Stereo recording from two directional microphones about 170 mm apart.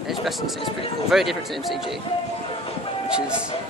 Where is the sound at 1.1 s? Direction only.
Centre (ahead or behind).